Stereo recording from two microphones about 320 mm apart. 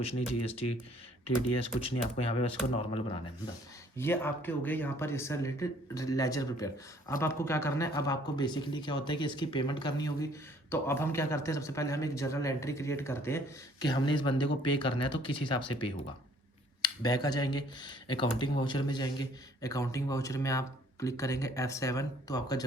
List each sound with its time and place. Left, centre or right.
1.5 s speech: centre
3.9 s speech: centre